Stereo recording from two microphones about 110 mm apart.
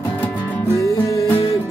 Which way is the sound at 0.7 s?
30° left (ahead or behind).